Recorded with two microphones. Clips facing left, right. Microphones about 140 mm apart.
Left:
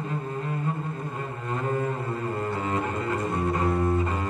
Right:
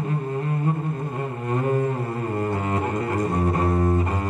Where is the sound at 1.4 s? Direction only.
40° right (ahead or behind).